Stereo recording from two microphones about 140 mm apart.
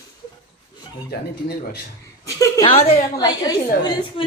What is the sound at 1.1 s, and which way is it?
Speech, 90° left.